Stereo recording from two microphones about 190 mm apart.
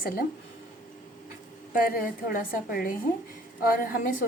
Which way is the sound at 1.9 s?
50° left (ahead or behind).